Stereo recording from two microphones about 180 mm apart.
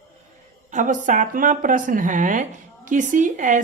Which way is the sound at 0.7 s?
45° right (ahead or behind).